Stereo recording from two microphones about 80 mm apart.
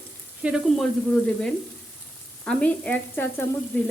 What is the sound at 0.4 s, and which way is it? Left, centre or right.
Frying, centre.